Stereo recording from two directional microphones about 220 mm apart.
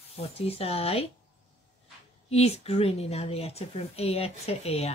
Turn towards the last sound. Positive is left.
turn(degrees=30)  # may be behind; listen again after turning